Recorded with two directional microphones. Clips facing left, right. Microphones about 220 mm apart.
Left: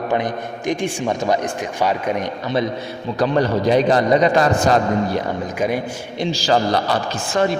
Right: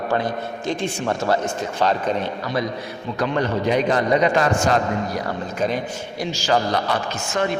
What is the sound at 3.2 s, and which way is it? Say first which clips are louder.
A man's voice: left 4 dB; 35° left (ahead or behind).